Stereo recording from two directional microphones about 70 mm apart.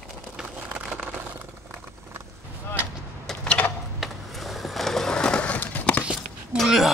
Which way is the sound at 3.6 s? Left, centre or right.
Left.